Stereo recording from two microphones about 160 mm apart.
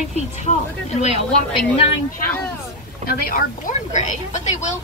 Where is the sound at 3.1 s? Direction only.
65° left (ahead or behind); by 4.6 s 50° left (ahead or behind).